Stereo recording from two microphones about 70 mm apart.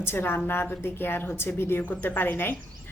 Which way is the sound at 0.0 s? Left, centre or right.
Left.